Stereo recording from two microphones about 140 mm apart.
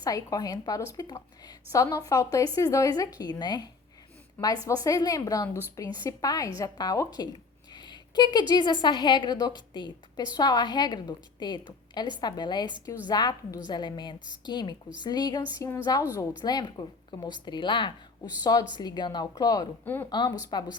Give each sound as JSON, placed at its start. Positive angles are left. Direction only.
{"t": 0.0, "sound": "a woman's voice", "side_deg": 25}
{"t": 19.8, "sound": "speech", "side_deg": 15}
{"t": 20.1, "sound": "a woman's voice", "side_deg": 30}